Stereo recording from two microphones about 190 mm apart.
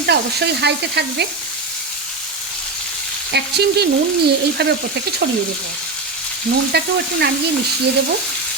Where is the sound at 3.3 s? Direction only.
60° right (ahead or behind).